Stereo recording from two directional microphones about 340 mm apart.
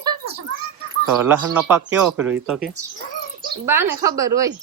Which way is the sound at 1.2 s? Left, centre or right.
Centre.